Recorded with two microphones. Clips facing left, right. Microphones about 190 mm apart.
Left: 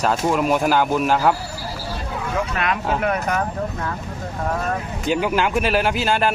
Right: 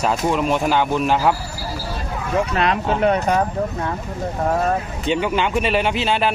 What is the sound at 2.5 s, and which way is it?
Speech, 30° right (ahead or behind).